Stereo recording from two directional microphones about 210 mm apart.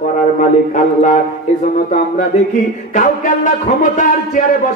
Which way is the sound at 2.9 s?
40° left (ahead or behind).